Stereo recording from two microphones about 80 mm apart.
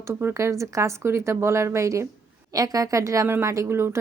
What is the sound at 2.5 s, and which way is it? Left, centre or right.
A woman's voice, right.